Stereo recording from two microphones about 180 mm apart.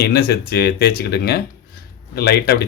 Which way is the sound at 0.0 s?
60° left (ahead or behind).